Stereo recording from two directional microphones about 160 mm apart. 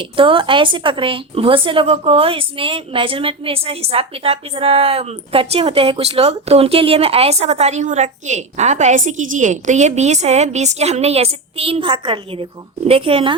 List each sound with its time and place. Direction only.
0.0 s speech: 35° right (ahead or behind)